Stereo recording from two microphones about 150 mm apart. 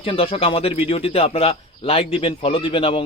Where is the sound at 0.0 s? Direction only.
40° left (ahead or behind).